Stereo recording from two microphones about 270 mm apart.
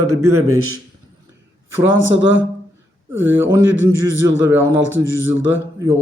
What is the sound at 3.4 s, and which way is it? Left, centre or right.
Speech, centre.